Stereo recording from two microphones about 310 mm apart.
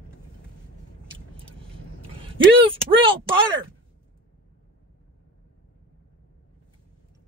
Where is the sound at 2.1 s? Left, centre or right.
Centre.